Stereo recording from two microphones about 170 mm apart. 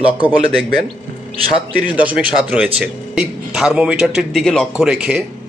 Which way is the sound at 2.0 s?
10° right (ahead or behind).